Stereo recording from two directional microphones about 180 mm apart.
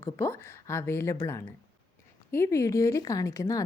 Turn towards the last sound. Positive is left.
turn(degrees=20)  # may be behind; listen again after turning